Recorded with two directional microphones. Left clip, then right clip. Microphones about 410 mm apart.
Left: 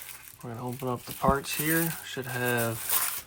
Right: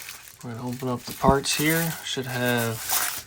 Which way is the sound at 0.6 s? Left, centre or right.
Centre.